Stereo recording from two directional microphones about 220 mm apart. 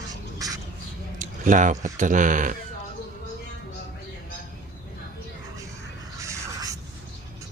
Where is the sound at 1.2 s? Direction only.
35° right (ahead or behind).